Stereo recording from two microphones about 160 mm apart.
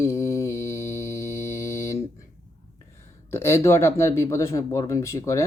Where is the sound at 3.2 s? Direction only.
15° left (ahead or behind).